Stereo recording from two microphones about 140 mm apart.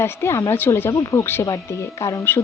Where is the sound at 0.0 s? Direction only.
20° left (ahead or behind).